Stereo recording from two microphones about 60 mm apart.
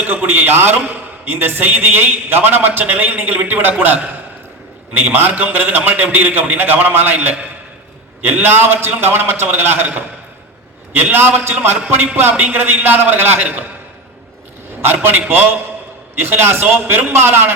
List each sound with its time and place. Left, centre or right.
0.0 s a man's voice: right
15.0 s a man's voice: right